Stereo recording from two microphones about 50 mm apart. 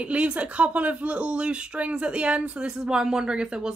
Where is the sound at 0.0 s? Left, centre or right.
Right.